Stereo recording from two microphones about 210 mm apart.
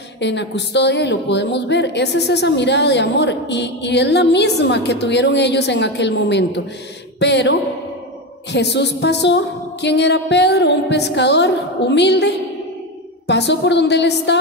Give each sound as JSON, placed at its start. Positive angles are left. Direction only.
{"t": 0.2, "sound": "a woman's voice", "side_deg": 55}
{"t": 13.3, "sound": "a woman's voice", "side_deg": 55}